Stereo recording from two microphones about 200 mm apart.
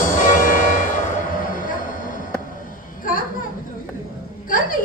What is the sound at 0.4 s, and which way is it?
Music, 40° left (ahead or behind).